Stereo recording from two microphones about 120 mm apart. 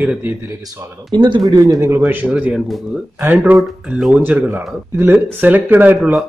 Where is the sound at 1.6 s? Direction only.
25° right (ahead or behind).